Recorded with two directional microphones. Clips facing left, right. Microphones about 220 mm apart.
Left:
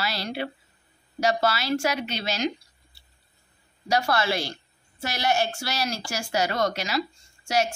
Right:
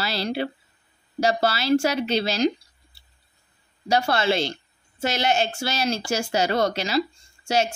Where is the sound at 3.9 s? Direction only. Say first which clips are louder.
Right 3 dB; 25° right (ahead or behind).